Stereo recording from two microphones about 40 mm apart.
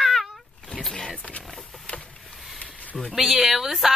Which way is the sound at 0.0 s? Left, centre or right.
Centre.